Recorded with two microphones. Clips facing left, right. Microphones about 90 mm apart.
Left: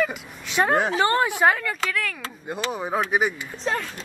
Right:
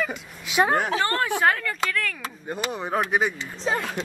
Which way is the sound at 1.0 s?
20° left (ahead or behind).